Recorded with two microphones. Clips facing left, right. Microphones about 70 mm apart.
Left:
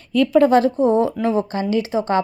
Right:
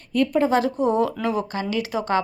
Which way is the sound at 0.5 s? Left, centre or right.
Left.